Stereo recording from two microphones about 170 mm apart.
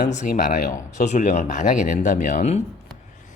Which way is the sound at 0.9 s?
45° left (ahead or behind).